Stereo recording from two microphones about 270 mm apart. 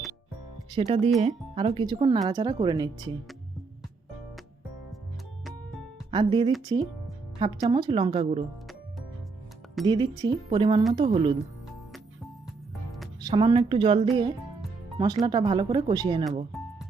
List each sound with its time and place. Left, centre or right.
0.7 s speech: right
6.1 s speech: centre
9.8 s speech: centre
13.1 s speech: centre